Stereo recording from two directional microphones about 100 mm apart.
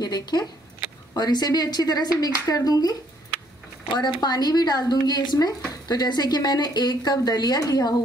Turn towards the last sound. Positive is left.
turn(degrees=40)  # may be behind; listen again after turning